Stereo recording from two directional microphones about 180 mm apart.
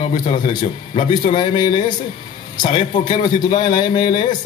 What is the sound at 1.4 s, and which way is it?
Speech, 25° left (ahead or behind).